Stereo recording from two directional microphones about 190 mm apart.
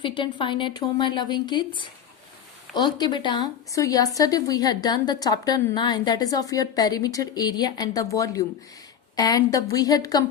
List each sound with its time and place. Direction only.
0.0 s a woman's voice: 25° left (ahead or behind)